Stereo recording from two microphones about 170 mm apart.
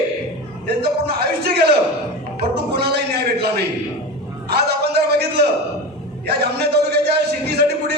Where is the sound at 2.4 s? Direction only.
70° right (ahead or behind).